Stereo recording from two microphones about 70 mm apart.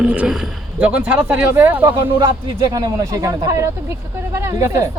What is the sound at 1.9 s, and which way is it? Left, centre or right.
Speech, right.